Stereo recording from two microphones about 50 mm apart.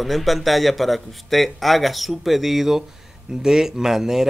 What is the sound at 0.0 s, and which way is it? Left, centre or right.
A man's voice, centre.